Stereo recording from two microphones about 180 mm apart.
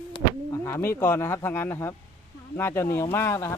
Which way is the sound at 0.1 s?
20° left (ahead or behind).